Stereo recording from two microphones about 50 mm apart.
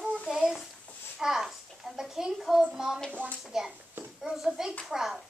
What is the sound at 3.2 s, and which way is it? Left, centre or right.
Speech, right.